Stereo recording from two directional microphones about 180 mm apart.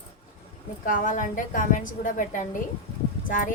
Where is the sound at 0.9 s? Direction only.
45° left (ahead or behind).